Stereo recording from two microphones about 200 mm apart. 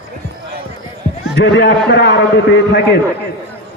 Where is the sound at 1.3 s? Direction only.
60° left (ahead or behind).